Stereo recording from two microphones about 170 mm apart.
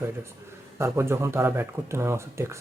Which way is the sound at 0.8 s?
15° right (ahead or behind).